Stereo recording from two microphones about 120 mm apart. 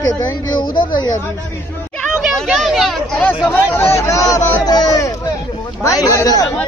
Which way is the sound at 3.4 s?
20° left (ahead or behind).